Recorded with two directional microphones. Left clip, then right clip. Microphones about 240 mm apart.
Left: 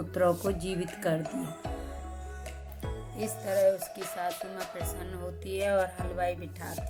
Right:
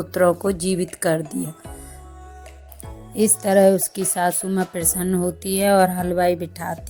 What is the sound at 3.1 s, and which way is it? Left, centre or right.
Speech, right.